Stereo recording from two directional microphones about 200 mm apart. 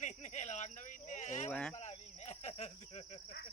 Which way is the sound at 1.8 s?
35° left (ahead or behind).